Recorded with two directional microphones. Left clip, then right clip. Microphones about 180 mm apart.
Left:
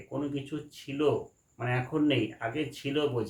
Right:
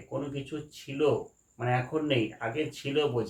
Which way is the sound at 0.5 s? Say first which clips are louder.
Even; 20° left (ahead or behind).